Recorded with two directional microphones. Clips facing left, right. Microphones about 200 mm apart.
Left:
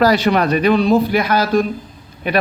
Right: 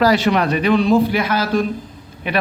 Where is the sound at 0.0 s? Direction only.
40° left (ahead or behind).